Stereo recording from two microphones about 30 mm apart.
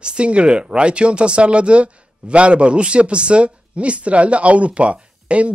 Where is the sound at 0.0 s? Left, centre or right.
Right.